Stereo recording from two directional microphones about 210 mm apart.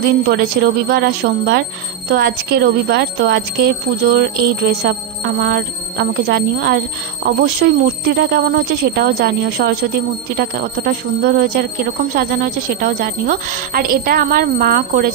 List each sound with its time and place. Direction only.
0.3 s speech: 50° right (ahead or behind)